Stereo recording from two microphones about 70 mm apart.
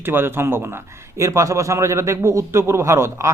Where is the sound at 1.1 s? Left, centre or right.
Right.